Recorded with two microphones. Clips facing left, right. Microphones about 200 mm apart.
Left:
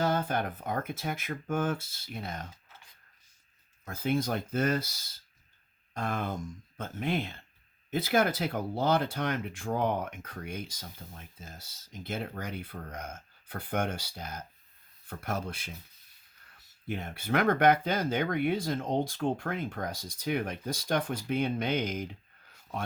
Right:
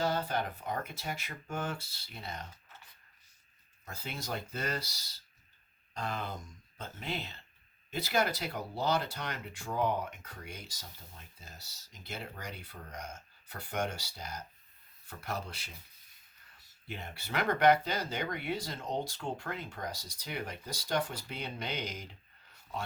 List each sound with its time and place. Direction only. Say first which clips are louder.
0.0 s speech: left 3 dB; 50° left (ahead or behind)
3.8 s speech: left 11 dB; 50° left (ahead or behind)
5.9 s a sound: left 5 dB; 50° left (ahead or behind)
6.7 s speech: left 8 dB; 50° left (ahead or behind)
16.8 s speech: left 8 dB; 50° left (ahead or behind)